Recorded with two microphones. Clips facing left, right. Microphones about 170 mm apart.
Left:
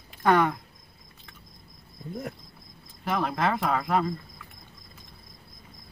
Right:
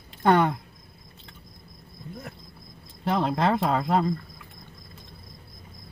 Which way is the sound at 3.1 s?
25° right (ahead or behind).